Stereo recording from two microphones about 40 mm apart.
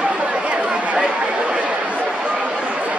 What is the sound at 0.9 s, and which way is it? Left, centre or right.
Chatter, right.